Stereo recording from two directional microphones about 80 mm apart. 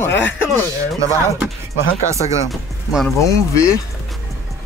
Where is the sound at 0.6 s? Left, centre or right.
Right.